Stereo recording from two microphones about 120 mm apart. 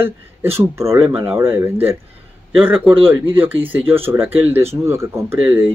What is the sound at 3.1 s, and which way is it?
Speech, 15° right (ahead or behind).